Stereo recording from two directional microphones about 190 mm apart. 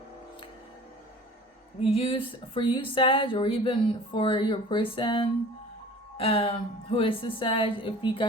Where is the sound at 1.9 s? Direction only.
30° left (ahead or behind).